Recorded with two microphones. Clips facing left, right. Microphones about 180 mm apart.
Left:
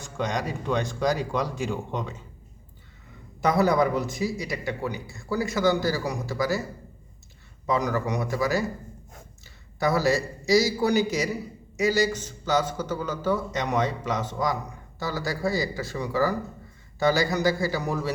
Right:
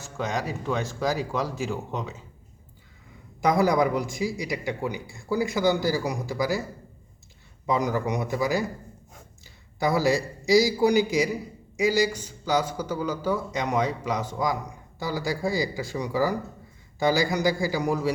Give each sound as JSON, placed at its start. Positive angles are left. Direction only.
{"t": 0.2, "sound": "speech", "side_deg": -5}
{"t": 3.6, "sound": "a man's voice", "side_deg": -15}
{"t": 7.7, "sound": "a man's voice", "side_deg": -15}
{"t": 9.8, "sound": "a man's voice", "side_deg": -15}